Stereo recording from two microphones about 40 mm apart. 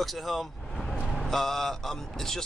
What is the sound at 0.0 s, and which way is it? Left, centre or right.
Speech, centre.